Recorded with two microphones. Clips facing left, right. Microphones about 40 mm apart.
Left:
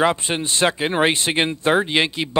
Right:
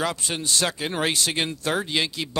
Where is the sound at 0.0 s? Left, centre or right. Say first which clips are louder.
Left 7 dB; left.